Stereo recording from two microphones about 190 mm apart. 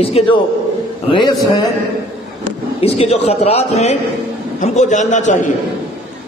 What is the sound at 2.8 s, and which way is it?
A man's voice, 30° left (ahead or behind).